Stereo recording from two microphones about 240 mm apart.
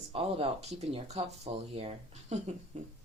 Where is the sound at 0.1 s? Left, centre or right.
Right.